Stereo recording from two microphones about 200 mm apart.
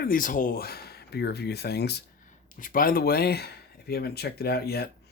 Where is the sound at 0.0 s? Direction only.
45° left (ahead or behind).